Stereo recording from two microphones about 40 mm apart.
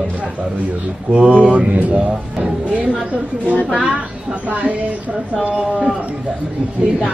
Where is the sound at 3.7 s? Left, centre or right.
Right.